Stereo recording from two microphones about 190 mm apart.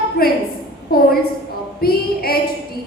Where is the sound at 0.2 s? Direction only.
55° left (ahead or behind).